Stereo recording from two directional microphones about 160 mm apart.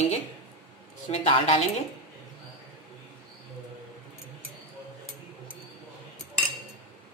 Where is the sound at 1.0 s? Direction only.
40° left (ahead or behind).